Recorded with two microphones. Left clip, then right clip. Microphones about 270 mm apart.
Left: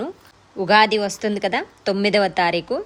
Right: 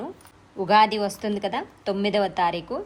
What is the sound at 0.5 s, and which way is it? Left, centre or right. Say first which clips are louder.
A woman's voice: left 3 dB; centre.